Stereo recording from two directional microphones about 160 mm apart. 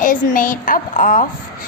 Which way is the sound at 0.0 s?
55° left (ahead or behind).